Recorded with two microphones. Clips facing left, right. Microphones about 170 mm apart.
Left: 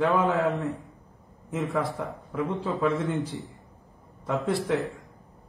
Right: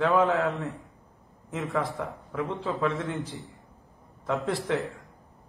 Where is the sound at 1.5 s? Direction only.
Centre (ahead or behind).